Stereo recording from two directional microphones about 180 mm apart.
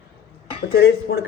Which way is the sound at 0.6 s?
70° left (ahead or behind).